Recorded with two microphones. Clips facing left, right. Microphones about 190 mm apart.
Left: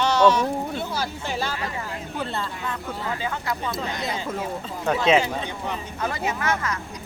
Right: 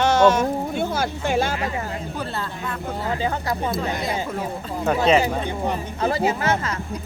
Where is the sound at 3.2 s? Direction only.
40° right (ahead or behind).